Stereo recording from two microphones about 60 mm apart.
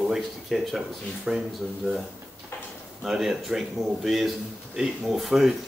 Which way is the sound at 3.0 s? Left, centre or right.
Centre.